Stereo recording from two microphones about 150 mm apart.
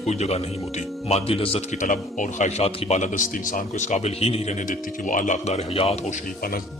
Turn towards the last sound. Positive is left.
turn(degrees=45)  # may be behind; listen again after turning